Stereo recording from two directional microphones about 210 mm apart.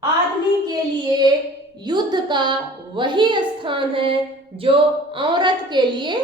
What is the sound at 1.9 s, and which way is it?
A woman's voice, 20° right (ahead or behind).